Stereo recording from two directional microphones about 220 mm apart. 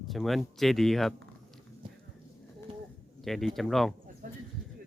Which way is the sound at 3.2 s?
Centre (ahead or behind).